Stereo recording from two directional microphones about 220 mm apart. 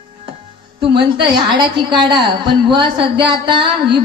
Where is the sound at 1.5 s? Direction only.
20° right (ahead or behind).